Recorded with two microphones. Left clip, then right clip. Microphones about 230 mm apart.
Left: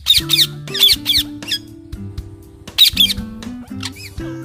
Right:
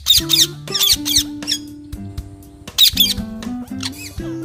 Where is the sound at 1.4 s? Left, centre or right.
Centre.